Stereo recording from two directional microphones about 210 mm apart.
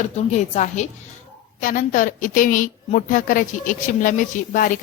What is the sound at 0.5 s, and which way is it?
A woman's voice, 35° left (ahead or behind).